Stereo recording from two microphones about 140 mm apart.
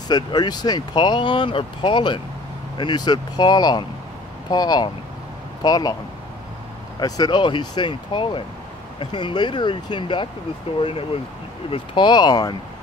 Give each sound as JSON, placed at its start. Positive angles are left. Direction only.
{"t": 0.1, "sound": "speech", "side_deg": 30}
{"t": 7.0, "sound": "speech", "side_deg": 30}